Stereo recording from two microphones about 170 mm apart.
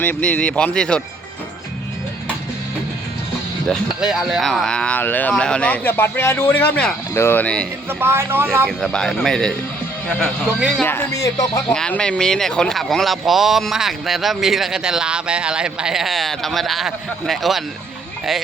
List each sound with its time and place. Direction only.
0.0 s speech: 10° left (ahead or behind)
3.7 s speech: centre (ahead or behind)
7.9 s a man's voice: 15° right (ahead or behind)
8.6 s speech: 5° left (ahead or behind)
11.2 s speech: 20° left (ahead or behind)
11.7 s speech: 5° left (ahead or behind)